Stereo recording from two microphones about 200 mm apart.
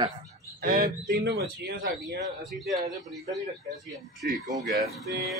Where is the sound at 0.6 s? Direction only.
45° right (ahead or behind).